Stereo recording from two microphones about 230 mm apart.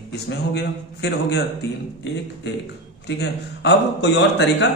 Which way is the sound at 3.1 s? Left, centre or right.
Left.